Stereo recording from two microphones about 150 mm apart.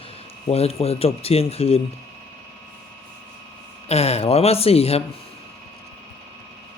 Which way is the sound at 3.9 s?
45° left (ahead or behind).